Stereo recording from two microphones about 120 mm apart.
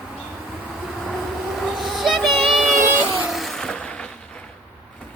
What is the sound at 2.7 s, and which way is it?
Vehicle, 20° right (ahead or behind).